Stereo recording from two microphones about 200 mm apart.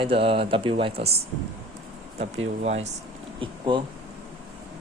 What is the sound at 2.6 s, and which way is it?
Speech, 35° right (ahead or behind).